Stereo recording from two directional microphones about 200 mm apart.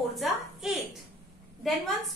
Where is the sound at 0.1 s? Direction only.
Centre (ahead or behind).